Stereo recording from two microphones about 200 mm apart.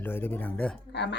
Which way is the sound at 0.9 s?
60° left (ahead or behind).